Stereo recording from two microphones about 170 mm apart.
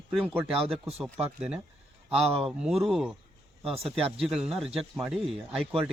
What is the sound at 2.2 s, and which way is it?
Speech, 35° right (ahead or behind).